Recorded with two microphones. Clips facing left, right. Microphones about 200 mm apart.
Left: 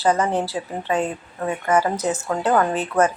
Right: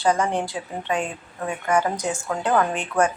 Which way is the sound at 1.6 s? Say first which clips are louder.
Left 2 dB; 5° left (ahead or behind).